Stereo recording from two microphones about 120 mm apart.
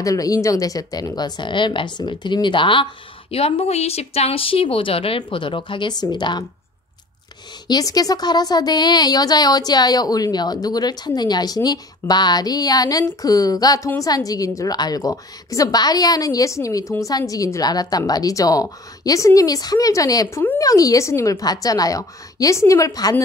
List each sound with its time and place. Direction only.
0.0 s speech: 30° left (ahead or behind)
7.6 s a woman's voice: 35° left (ahead or behind)